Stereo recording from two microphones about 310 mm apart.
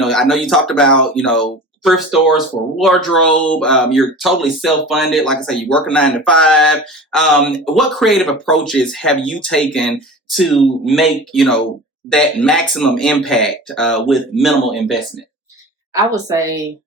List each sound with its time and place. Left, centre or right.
0.0 s speech: centre